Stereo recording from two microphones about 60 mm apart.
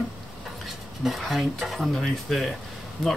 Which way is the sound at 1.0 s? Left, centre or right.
Centre.